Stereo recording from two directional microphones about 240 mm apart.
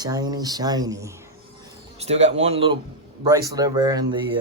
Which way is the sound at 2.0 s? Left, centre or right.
Right.